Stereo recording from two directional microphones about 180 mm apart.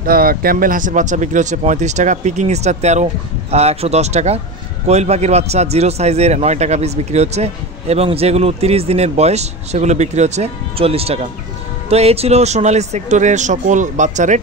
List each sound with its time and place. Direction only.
0.0 s speech: 55° right (ahead or behind)